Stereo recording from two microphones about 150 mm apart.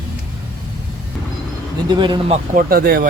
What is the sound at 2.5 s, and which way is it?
Speech, 70° right (ahead or behind).